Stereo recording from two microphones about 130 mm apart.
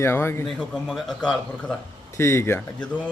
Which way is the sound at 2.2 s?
20° left (ahead or behind).